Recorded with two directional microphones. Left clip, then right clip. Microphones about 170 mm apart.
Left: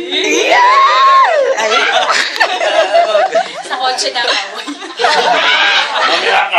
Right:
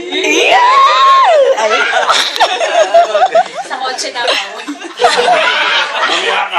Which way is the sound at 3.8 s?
50° left (ahead or behind).